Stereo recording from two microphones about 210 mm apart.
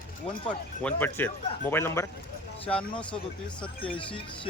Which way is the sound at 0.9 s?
10° left (ahead or behind).